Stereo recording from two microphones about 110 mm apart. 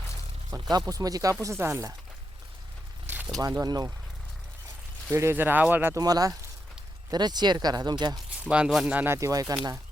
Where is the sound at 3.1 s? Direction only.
15° right (ahead or behind).